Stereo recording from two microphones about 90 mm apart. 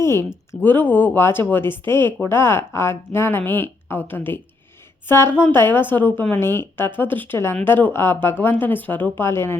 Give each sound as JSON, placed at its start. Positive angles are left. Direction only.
{"t": 0.0, "sound": "speech", "side_deg": 30}